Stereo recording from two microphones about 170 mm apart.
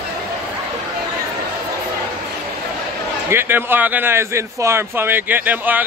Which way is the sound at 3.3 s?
10° right (ahead or behind).